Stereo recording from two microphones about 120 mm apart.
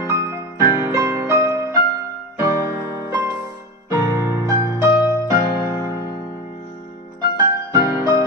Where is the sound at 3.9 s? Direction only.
25° right (ahead or behind).